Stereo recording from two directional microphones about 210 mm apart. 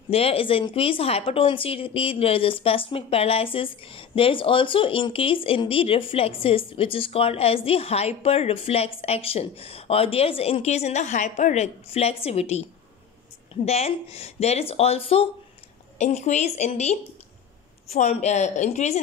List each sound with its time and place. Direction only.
0.1 s speech: 25° left (ahead or behind)
13.7 s a woman's voice: 30° left (ahead or behind)